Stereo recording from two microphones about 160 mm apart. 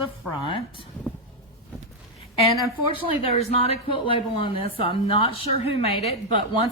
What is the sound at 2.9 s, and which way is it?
Speech, 40° left (ahead or behind).